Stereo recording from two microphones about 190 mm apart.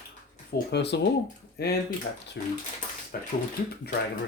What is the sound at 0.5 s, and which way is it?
Speech, 60° left (ahead or behind).